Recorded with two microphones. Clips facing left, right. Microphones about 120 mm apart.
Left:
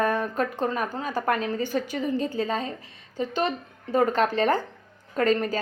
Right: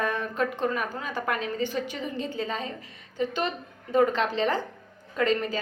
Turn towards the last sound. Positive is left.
turn(degrees=40)  # may be behind; listen again after turning